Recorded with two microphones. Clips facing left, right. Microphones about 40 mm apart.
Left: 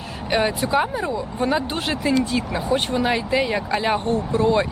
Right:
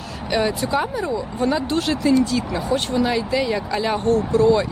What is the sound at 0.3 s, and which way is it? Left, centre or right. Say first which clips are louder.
Speech: even; left.